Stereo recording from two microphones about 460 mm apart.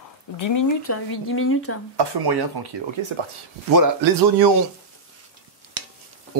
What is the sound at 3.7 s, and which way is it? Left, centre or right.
Speech, right.